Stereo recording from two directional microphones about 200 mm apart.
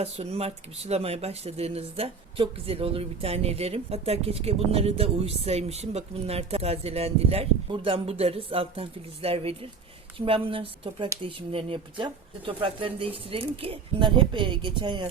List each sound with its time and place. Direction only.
0.0 s speech: 30° right (ahead or behind)